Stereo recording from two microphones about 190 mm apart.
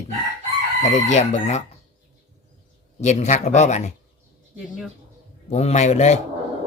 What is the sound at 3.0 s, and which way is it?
Speech, 40° left (ahead or behind).